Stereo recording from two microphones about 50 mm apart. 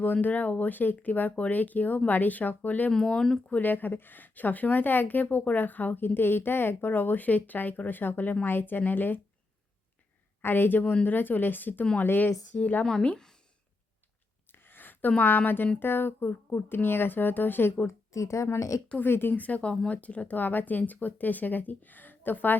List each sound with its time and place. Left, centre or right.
0.0 s speech: left
2.9 s speech: centre
3.5 s speech: left
10.4 s speech: left
12.5 s a woman's voice: left
12.8 s speech: centre
13.1 s a sound: centre
14.5 s a sound: left
15.2 s speech: left
17.8 s a woman's voice: left
18.9 s speech: left
19.4 s speech: left